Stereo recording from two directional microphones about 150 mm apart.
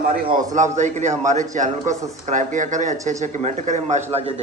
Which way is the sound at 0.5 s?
55° right (ahead or behind).